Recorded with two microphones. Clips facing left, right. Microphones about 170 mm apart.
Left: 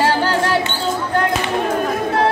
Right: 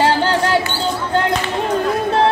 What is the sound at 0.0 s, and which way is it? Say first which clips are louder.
Music: right 1 dB; 25° right (ahead or behind).